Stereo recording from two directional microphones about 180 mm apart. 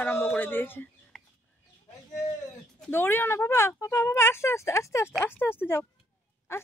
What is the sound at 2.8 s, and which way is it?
Speech, 10° left (ahead or behind).